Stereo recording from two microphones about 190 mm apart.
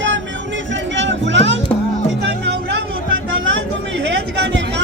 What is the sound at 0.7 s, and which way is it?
Vehicle, 75° right (ahead or behind).